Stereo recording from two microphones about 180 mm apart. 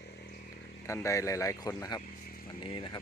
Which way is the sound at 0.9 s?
15° left (ahead or behind).